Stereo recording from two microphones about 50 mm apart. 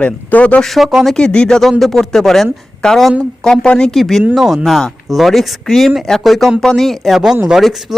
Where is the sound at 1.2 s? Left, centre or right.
Centre.